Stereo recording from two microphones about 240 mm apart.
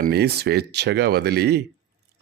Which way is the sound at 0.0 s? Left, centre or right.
Right.